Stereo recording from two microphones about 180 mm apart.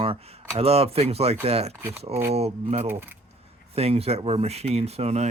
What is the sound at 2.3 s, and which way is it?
Speech, 35° right (ahead or behind).